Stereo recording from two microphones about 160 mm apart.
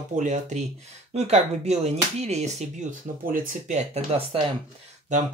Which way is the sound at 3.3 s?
55° right (ahead or behind).